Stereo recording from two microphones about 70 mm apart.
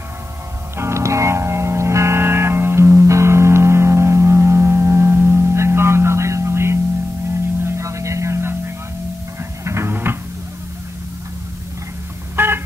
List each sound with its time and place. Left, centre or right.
0.7 s music: right
7.2 s hum: right
9.4 s music: right
12.4 s a sound: right